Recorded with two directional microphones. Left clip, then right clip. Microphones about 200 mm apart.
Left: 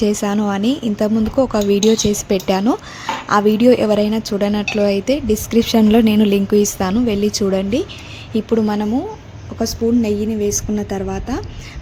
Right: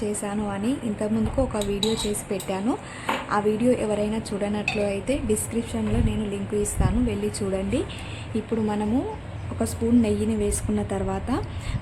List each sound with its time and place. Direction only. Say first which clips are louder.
0.0 s speech: left 10 dB; 35° left (ahead or behind)
9.6 s a woman's voice: left 6 dB; 20° left (ahead or behind)